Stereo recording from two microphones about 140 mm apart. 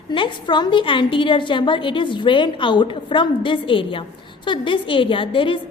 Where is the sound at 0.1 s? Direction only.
35° left (ahead or behind).